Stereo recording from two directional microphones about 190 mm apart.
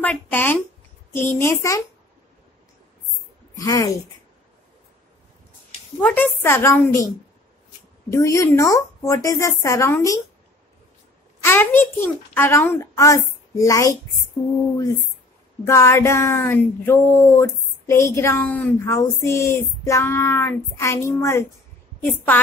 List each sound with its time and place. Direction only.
0.0 s speech: 10° left (ahead or behind)
3.5 s speech: 20° left (ahead or behind)
5.9 s speech: 10° left (ahead or behind)
8.1 s speech: 15° left (ahead or behind)
11.4 s speech: 10° left (ahead or behind)
15.6 s speech: 15° left (ahead or behind)